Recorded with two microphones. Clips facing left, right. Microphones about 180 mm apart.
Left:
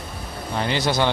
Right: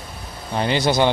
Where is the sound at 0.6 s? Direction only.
20° right (ahead or behind).